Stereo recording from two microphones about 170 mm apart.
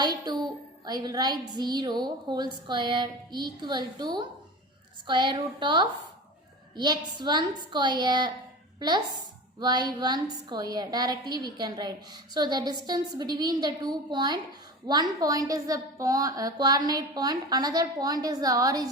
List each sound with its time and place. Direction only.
0.0 s a woman's voice: 25° right (ahead or behind)
9.6 s a woman's voice: 25° right (ahead or behind)